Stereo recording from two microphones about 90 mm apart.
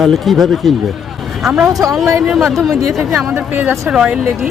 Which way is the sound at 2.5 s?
Centre (ahead or behind).